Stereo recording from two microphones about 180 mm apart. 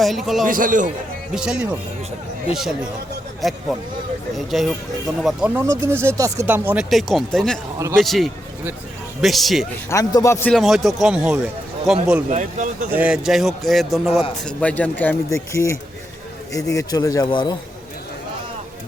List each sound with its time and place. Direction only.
0.0 s a man's voice: centre (ahead or behind)
0.4 s speech: 50° right (ahead or behind)
1.3 s a man's voice: 5° right (ahead or behind)
3.7 s a man's voice: centre (ahead or behind)
5.5 s speech: 15° right (ahead or behind)
6.9 s a man's voice: centre (ahead or behind)
9.9 s a man's voice: 20° left (ahead or behind)
10.5 s a man's voice: centre (ahead or behind)
12.3 s speech: 45° right (ahead or behind)
12.9 s a man's voice: 5° right (ahead or behind); by 17.6 s 25° left (ahead or behind)